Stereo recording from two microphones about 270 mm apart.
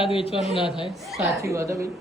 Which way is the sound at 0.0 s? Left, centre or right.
Centre.